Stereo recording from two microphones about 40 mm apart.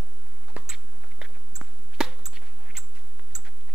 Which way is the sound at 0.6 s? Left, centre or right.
Right.